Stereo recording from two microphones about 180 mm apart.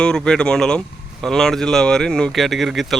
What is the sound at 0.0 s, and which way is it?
A man's voice, 5° left (ahead or behind).